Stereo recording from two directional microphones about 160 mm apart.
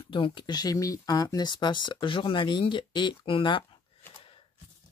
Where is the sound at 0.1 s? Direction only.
30° left (ahead or behind).